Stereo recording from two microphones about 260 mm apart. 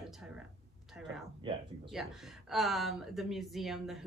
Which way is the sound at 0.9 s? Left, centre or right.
Centre.